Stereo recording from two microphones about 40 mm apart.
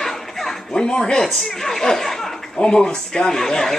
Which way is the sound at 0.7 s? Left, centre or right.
Centre.